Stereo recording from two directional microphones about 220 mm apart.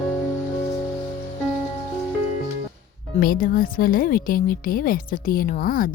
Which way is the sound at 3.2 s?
40° left (ahead or behind).